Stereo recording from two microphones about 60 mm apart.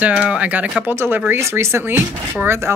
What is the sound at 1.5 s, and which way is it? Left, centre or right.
Speech, right.